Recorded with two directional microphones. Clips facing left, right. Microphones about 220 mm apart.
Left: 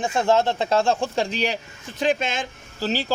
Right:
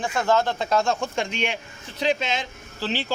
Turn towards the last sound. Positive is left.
turn(degrees=40)  # may be behind; listen again after turning